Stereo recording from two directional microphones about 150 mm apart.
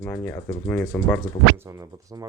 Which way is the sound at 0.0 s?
10° left (ahead or behind).